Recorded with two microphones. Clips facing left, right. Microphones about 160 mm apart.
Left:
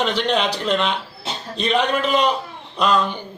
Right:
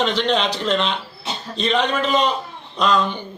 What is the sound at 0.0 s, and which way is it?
A man's voice, 10° left (ahead or behind).